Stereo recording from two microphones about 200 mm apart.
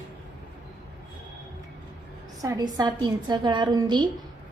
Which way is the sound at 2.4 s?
20° right (ahead or behind).